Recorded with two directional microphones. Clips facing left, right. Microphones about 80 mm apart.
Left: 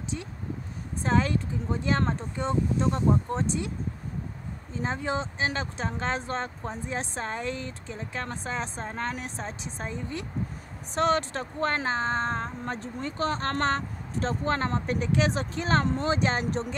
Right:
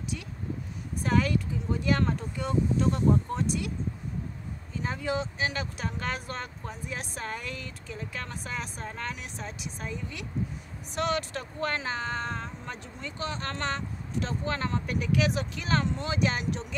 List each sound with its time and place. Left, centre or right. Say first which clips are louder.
1.0 s speech: left 1 dB; left
4.7 s speech: left 1 dB; left